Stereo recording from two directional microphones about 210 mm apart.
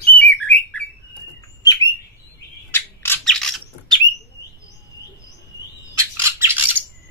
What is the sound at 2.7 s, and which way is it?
Squawk, 10° left (ahead or behind).